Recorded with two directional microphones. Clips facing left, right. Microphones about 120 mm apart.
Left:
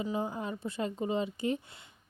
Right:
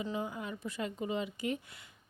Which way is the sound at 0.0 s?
35° left (ahead or behind).